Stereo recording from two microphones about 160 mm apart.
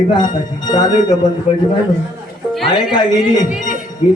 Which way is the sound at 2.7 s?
25° left (ahead or behind).